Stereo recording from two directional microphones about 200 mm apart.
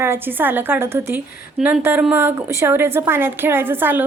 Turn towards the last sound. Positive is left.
turn(degrees=-10)  # may be behind; listen again after turning